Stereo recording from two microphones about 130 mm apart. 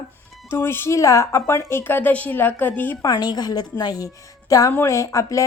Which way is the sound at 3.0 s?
30° left (ahead or behind).